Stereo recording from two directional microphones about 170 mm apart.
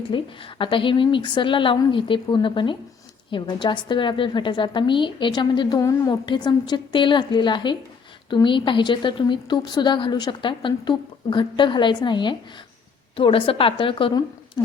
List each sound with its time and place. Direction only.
0.1 s a woman's voice: 30° left (ahead or behind)